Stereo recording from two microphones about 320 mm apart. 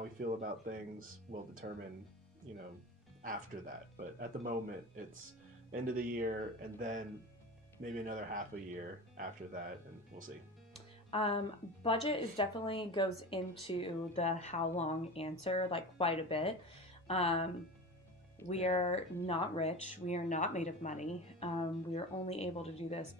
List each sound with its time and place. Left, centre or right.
0.0 s speech: right
3.2 s speech: right
11.1 s a woman's voice: centre
18.5 s speech: centre